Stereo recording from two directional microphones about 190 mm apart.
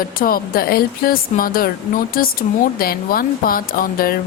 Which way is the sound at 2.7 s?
50° left (ahead or behind).